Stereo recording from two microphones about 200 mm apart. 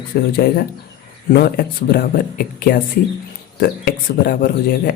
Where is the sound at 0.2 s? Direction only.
50° left (ahead or behind).